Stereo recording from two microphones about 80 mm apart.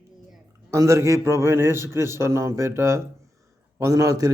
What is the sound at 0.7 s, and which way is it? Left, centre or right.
A man's voice, right.